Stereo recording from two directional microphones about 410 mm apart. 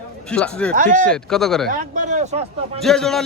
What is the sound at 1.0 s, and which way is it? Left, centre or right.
Speech, centre.